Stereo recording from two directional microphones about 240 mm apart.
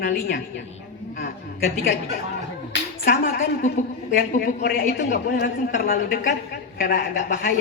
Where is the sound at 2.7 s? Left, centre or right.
Left.